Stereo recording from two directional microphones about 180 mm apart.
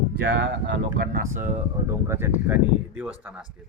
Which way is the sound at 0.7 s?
65° right (ahead or behind).